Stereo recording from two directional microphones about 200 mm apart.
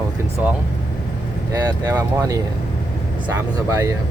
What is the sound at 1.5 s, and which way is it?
Speech, 15° right (ahead or behind).